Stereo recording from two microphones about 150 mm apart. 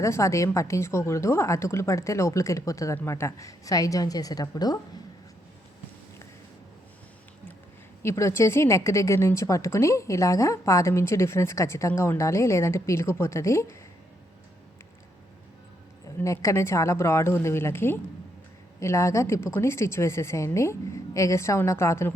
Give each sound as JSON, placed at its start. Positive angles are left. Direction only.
{"t": 0.0, "sound": "a woman's voice", "side_deg": 20}
{"t": 8.0, "sound": "a woman's voice", "side_deg": 20}
{"t": 16.0, "sound": "a woman's voice", "side_deg": 20}